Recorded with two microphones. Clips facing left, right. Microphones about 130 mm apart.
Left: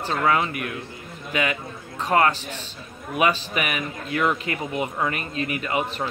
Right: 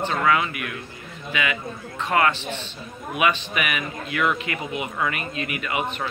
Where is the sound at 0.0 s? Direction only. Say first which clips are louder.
Even; 35° left (ahead or behind).